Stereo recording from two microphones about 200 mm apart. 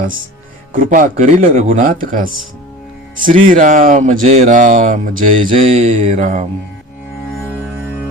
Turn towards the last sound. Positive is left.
turn(degrees=-35)  # may be behind; listen again after turning